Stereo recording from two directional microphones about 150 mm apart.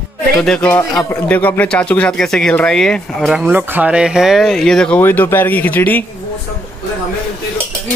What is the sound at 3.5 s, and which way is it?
Speech, 10° right (ahead or behind).